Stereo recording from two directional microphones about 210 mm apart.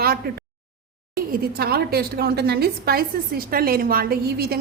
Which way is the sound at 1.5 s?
50° right (ahead or behind).